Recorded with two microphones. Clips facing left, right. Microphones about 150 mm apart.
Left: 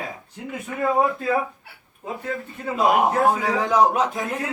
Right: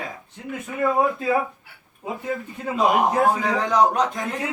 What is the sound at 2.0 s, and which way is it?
Speech, 10° right (ahead or behind).